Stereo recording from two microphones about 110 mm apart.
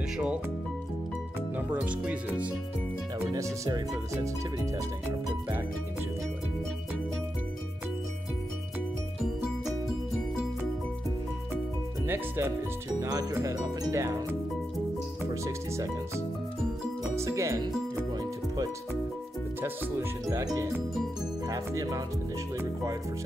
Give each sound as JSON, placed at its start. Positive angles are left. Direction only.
{"t": 1.7, "sound": "speech", "side_deg": -10}
{"t": 3.3, "sound": "speech", "side_deg": -30}
{"t": 12.1, "sound": "speech", "side_deg": -25}
{"t": 15.4, "sound": "speech", "side_deg": -25}
{"t": 17.1, "sound": "music", "side_deg": -25}
{"t": 19.6, "sound": "speech", "side_deg": -25}